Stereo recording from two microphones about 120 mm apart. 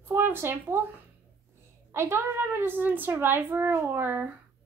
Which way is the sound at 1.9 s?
20° right (ahead or behind).